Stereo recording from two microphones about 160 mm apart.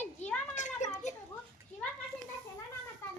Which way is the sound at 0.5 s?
50° left (ahead or behind).